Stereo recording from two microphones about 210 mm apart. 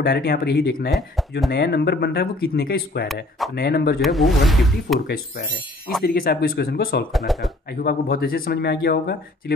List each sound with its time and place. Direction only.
0.0 s speech: 50° left (ahead or behind)
4.0 s speech: centre (ahead or behind)
6.0 s speech: 45° left (ahead or behind)
7.1 s speech: centre (ahead or behind)
7.7 s speech: 45° left (ahead or behind)